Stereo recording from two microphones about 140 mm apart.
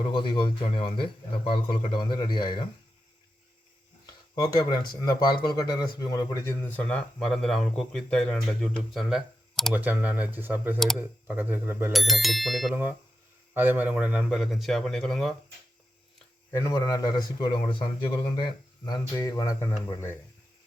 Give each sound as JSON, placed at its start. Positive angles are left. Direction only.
{"t": 0.1, "sound": "a man's voice", "side_deg": 35}
{"t": 4.7, "sound": "a man's voice", "side_deg": 30}
{"t": 9.7, "sound": "speech", "side_deg": -10}
{"t": 11.9, "sound": "speech", "side_deg": 0}
{"t": 12.7, "sound": "speech", "side_deg": -10}
{"t": 16.5, "sound": "a man's voice", "side_deg": 20}
{"t": 18.9, "sound": "a man's voice", "side_deg": 25}